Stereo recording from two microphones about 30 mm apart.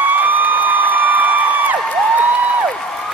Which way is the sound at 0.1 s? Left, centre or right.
Right.